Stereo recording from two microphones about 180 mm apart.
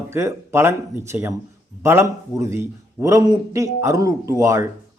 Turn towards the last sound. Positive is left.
turn(degrees=-15)  # may be behind; listen again after turning